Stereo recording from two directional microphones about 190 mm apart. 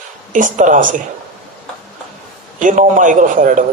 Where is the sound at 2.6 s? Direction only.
40° right (ahead or behind).